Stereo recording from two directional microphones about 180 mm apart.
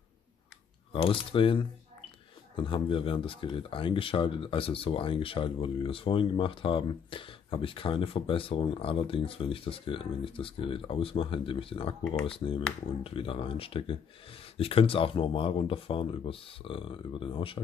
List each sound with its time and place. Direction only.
1.0 s speech: 30° left (ahead or behind)